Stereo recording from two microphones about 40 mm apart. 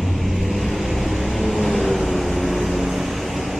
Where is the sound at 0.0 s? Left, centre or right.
Centre.